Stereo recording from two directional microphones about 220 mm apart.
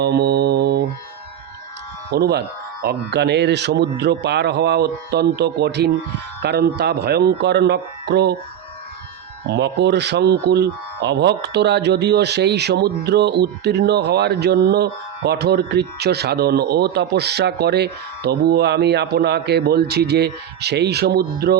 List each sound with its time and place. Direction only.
0.0 s mantra: 50° right (ahead or behind)
2.0 s speech: 45° right (ahead or behind)
9.5 s speech: 50° right (ahead or behind)